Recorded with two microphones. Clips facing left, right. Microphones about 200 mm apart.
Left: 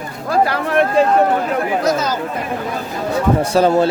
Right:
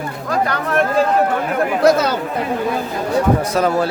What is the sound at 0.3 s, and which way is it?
Speech, 30° left (ahead or behind).